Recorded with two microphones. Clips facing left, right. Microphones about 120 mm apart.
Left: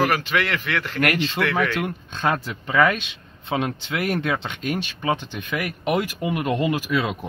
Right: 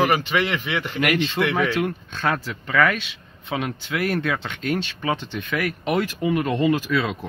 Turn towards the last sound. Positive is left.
turn(degrees=15)  # may be behind; listen again after turning